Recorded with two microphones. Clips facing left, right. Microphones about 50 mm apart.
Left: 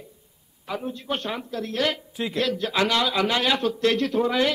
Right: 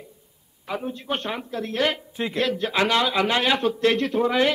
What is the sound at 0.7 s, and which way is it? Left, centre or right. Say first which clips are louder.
Speech: right 1 dB; centre.